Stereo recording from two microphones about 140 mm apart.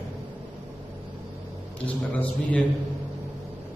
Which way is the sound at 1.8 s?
10° left (ahead or behind).